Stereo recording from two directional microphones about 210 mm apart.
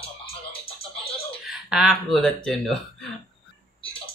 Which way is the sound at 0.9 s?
25° left (ahead or behind).